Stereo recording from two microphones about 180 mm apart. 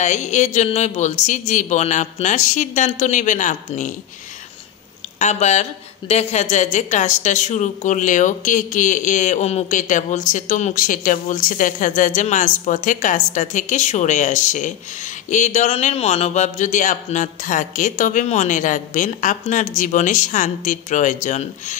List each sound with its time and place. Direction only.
0.0 s speech: 40° left (ahead or behind)
5.2 s a woman's voice: 40° left (ahead or behind)